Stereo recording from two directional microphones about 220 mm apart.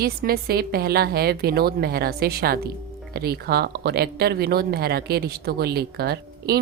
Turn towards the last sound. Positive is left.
turn(degrees=-45)  # may be behind; listen again after turning